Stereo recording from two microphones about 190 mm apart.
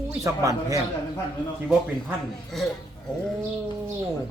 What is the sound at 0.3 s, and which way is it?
Speech, 15° right (ahead or behind).